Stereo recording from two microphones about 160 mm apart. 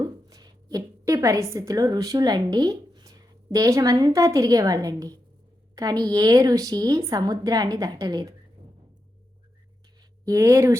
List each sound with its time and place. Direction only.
0.0 s a woman's voice: 25° right (ahead or behind)
10.0 s speech: 20° right (ahead or behind)